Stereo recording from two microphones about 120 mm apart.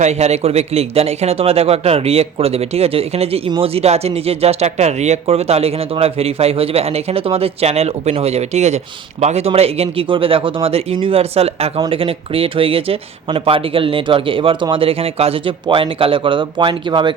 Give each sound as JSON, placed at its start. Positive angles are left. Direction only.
{"t": 0.0, "sound": "speech", "side_deg": -65}